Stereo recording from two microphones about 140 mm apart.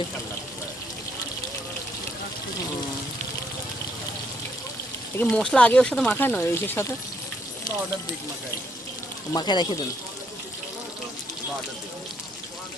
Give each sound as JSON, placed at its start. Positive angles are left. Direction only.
{"t": 5.1, "sound": "speech", "side_deg": 10}
{"t": 9.3, "sound": "speech", "side_deg": 30}